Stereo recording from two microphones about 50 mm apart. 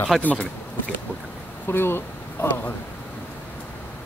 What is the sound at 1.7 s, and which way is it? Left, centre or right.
Speech, left.